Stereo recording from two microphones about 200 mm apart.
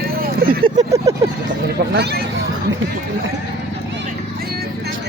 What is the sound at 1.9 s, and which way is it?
Speech, 55° right (ahead or behind).